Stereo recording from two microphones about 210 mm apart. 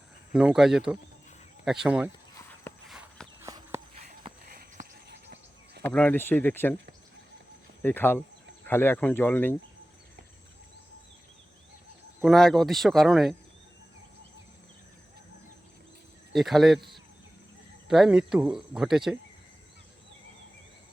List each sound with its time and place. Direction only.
0.3 s speech: 5° right (ahead or behind)
2.8 s walk: centre (ahead or behind)
3.4 s walk: 15° right (ahead or behind)
5.0 s a sound: 50° right (ahead or behind)
5.8 s speech: 5° left (ahead or behind)
7.8 s speech: 10° left (ahead or behind)
12.2 s speech: centre (ahead or behind)
16.3 s speech: centre (ahead or behind)